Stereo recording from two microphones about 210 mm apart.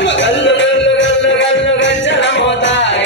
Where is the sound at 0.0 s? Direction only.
60° left (ahead or behind).